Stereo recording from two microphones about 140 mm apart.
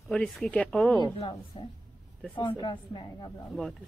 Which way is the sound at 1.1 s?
35° left (ahead or behind).